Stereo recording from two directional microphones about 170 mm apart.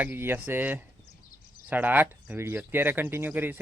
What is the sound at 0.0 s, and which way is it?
Speech, 15° right (ahead or behind).